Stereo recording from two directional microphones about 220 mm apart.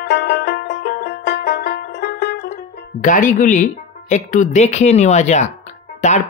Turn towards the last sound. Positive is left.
turn(degrees=30)  # may be behind; listen again after turning